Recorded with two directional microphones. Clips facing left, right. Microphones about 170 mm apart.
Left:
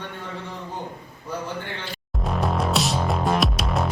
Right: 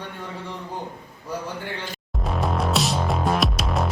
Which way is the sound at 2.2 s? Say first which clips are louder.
Even; centre (ahead or behind).